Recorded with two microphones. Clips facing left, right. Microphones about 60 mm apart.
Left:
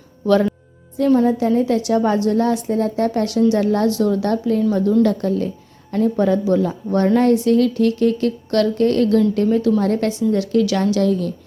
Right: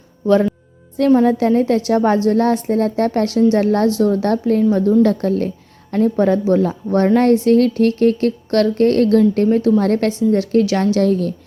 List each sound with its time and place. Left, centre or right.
1.2 s speech: right
10.1 s speech: right